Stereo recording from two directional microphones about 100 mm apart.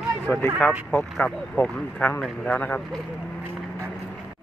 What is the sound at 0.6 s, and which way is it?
Speech, 10° left (ahead or behind).